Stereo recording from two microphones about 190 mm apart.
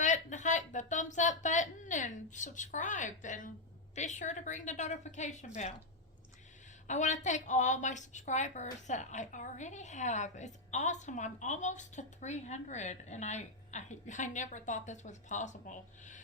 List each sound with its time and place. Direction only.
0.0 s a sound: 40° left (ahead or behind)
3.9 s a woman's voice: 40° left (ahead or behind)
6.8 s a woman's voice: 40° left (ahead or behind)